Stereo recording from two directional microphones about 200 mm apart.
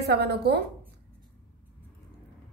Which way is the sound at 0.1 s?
55° right (ahead or behind).